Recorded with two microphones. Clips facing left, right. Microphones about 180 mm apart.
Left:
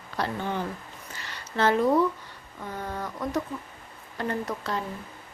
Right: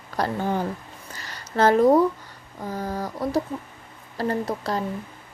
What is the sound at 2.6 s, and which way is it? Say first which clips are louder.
Speech: right 5 dB; 35° right (ahead or behind).